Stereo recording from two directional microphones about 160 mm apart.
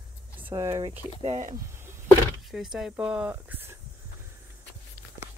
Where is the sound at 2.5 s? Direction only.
Centre (ahead or behind).